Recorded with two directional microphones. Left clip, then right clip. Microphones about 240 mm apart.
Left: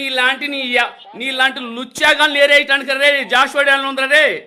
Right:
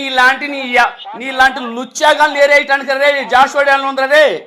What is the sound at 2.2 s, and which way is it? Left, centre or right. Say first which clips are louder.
A man's voice: right 2 dB; left.